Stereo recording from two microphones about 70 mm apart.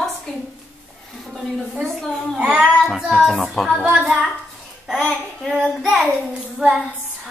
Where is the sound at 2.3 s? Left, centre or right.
Centre.